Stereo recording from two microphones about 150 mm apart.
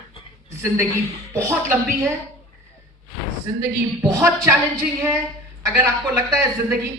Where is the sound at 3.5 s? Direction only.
20° right (ahead or behind).